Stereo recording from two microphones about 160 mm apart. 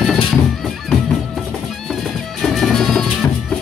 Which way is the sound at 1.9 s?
Centre (ahead or behind).